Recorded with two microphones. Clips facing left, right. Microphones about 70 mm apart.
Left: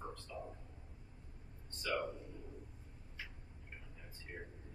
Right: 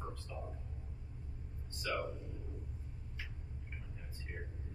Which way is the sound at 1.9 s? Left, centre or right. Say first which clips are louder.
Even; centre.